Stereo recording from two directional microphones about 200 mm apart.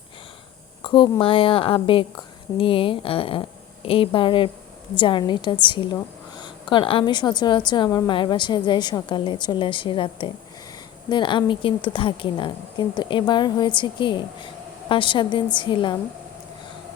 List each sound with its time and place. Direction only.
0.8 s a woman's voice: 25° left (ahead or behind)